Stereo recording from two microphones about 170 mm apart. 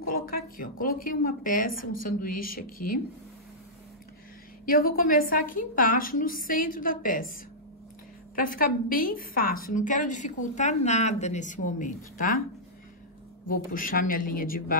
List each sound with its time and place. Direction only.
0.1 s a woman's voice: 60° left (ahead or behind)
4.6 s a woman's voice: 55° left (ahead or behind)
8.4 s a woman's voice: 55° left (ahead or behind)
13.5 s a woman's voice: 55° left (ahead or behind)